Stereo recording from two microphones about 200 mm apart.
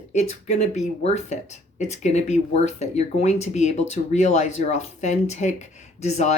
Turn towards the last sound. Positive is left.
turn(degrees=35)  # may be behind; listen again after turning